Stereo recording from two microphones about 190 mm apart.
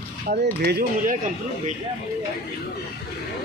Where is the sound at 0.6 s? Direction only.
50° right (ahead or behind).